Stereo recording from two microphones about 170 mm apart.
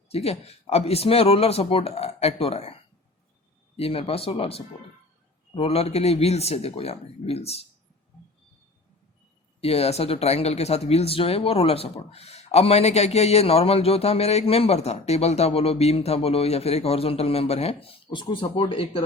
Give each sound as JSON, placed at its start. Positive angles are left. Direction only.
{"t": 0.1, "sound": "speech", "side_deg": 35}
{"t": 3.8, "sound": "speech", "side_deg": 35}
{"t": 9.6, "sound": "speech", "side_deg": 35}